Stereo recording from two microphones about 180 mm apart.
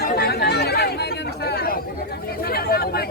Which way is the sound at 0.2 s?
65° left (ahead or behind).